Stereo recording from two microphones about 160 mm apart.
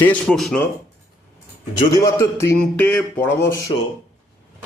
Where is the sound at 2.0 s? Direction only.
20° left (ahead or behind).